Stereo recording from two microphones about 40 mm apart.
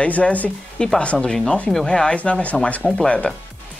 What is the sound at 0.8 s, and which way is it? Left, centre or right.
Speech, left.